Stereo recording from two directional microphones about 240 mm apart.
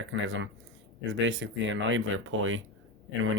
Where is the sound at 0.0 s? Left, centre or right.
Right.